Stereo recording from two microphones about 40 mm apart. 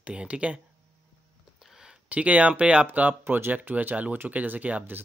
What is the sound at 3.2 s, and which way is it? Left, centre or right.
Speech, right.